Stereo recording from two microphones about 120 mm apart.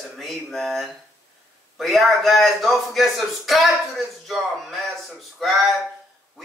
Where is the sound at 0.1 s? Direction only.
Centre (ahead or behind).